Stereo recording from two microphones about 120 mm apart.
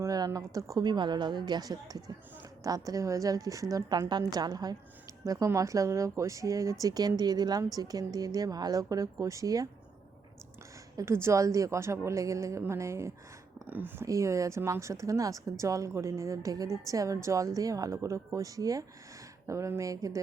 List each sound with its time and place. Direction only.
0.0 s a woman's voice: 30° right (ahead or behind)
10.9 s speech: 20° right (ahead or behind)